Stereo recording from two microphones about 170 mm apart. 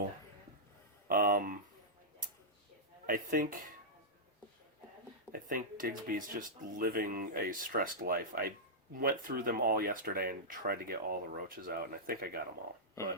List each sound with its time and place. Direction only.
1.0 s a sound: 55° right (ahead or behind)
3.1 s speech: 55° right (ahead or behind)
5.3 s speech: 55° right (ahead or behind)